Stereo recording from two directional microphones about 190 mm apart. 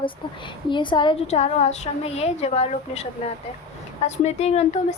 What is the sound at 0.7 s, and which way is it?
A woman's voice, 25° left (ahead or behind).